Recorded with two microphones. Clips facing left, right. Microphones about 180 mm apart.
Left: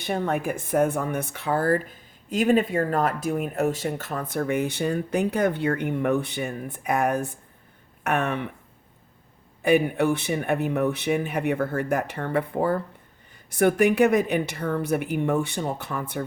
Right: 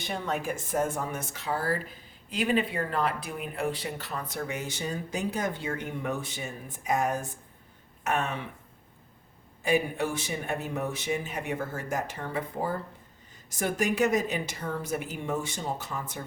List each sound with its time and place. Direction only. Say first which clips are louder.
0.0 s speech: left 6 dB; 55° left (ahead or behind)
9.6 s speech: left 7 dB; 60° left (ahead or behind)